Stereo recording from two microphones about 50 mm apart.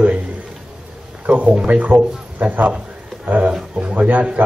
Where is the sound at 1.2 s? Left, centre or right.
Right.